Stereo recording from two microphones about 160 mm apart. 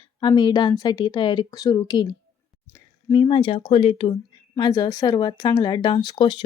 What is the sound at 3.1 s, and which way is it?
Speech, 30° left (ahead or behind).